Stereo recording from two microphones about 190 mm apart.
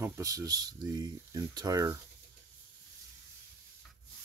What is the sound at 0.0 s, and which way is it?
Speech, 15° right (ahead or behind).